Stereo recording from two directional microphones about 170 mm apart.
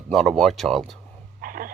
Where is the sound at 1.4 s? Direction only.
55° right (ahead or behind).